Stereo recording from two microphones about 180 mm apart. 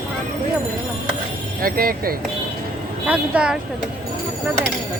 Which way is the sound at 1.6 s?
55° right (ahead or behind).